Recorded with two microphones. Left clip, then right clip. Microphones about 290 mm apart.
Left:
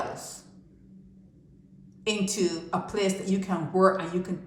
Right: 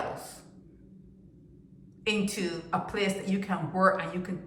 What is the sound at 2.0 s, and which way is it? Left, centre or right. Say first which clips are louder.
A woman's voice: left 3 dB; centre.